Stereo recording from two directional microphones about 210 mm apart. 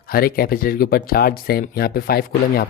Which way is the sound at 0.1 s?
45° left (ahead or behind).